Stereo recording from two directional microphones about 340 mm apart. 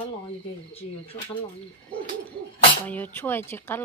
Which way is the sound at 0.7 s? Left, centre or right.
Centre.